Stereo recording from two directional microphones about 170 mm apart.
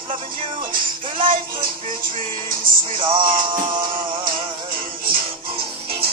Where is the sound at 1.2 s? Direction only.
30° right (ahead or behind).